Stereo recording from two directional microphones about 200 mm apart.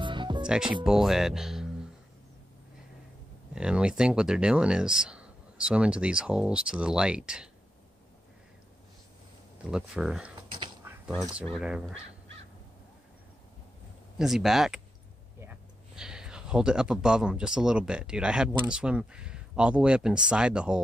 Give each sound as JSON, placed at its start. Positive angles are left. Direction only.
{"t": 0.0, "sound": "music", "side_deg": -25}
{"t": 0.8, "sound": "speech", "side_deg": 0}
{"t": 3.5, "sound": "speech", "side_deg": -5}
{"t": 9.7, "sound": "speech", "side_deg": -5}
{"t": 10.6, "sound": "a sound", "side_deg": -15}
{"t": 11.1, "sound": "speech", "side_deg": 0}
{"t": 14.1, "sound": "speech", "side_deg": 0}
{"t": 16.0, "sound": "speech", "side_deg": -5}